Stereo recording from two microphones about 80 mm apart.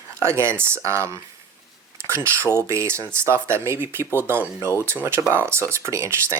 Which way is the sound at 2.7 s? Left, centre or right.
Right.